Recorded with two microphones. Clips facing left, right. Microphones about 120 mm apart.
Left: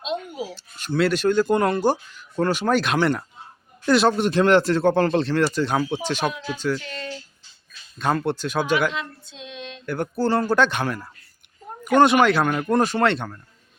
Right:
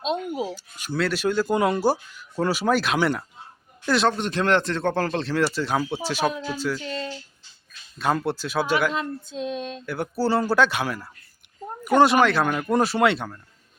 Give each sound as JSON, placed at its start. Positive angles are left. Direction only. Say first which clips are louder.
{"t": 0.0, "sound": "a sound", "louder": "right 3 dB", "side_deg": -40}
{"t": 0.5, "sound": "speech", "louder": "left 2 dB", "side_deg": -10}
{"t": 0.9, "sound": "speech", "louder": "left 4 dB", "side_deg": 0}
{"t": 6.8, "sound": "speech", "louder": "right 4 dB", "side_deg": -25}
{"t": 7.9, "sound": "speech", "louder": "left 1 dB", "side_deg": -5}
{"t": 8.9, "sound": "female singing", "louder": "right 4 dB", "side_deg": -40}
{"t": 9.8, "sound": "speech", "louder": "left 3 dB", "side_deg": -5}